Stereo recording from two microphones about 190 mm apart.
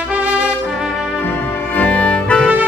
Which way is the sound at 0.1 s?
5° right (ahead or behind).